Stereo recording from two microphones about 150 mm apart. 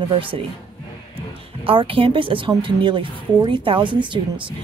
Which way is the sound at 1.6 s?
35° right (ahead or behind).